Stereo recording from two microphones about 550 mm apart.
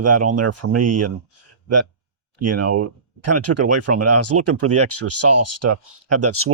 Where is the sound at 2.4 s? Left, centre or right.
Right.